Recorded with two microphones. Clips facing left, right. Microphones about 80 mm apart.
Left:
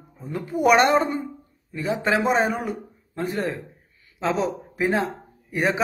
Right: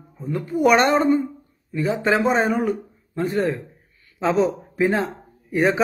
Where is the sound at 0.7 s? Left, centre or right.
Centre.